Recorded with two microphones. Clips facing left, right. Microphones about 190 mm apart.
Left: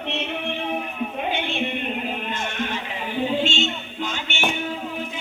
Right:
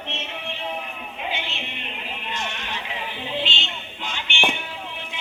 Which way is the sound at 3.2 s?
45° left (ahead or behind).